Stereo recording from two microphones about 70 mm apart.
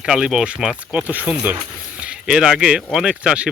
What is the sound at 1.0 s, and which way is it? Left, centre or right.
Speech, right.